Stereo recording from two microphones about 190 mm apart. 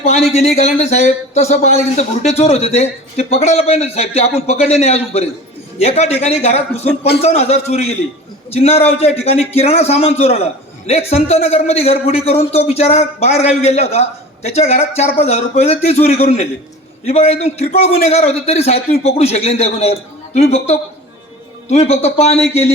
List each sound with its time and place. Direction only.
0.0 s speech: 35° left (ahead or behind)